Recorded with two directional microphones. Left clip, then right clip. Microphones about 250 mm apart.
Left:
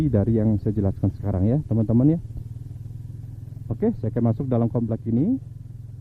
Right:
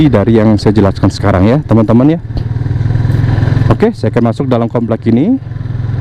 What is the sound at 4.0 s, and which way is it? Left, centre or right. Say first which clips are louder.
Speech: right 14 dB; centre.